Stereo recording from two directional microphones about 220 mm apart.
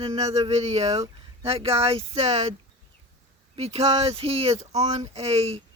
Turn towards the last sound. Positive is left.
turn(degrees=-25)  # may be behind; listen again after turning